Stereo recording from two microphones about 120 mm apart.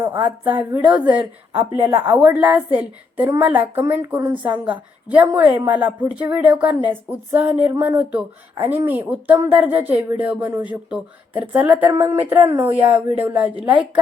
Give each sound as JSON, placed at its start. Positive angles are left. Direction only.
{"t": 0.2, "sound": "speech", "side_deg": -15}